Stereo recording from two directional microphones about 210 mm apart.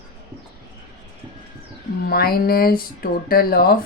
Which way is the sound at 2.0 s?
45° left (ahead or behind).